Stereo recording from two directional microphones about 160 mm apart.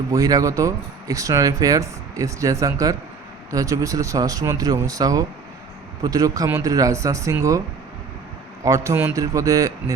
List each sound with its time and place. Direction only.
0.1 s speech: 20° right (ahead or behind)
8.6 s speech: 20° right (ahead or behind)